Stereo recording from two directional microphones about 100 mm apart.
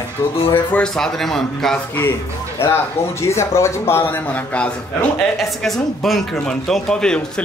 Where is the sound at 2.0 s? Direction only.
25° left (ahead or behind).